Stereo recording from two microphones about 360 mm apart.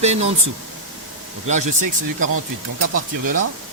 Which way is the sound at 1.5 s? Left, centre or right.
Centre.